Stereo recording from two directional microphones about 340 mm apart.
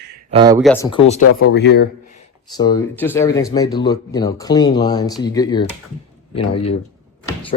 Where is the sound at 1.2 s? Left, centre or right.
Left.